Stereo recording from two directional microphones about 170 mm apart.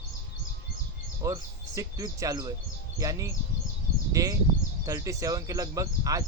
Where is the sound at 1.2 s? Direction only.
20° right (ahead or behind).